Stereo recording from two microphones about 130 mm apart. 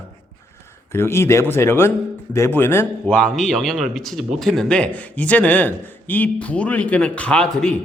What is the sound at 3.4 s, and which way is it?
Speech, centre (ahead or behind).